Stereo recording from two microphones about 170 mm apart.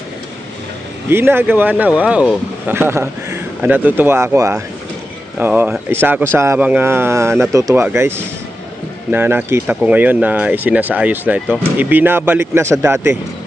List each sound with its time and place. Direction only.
1.1 s speech: 15° right (ahead or behind)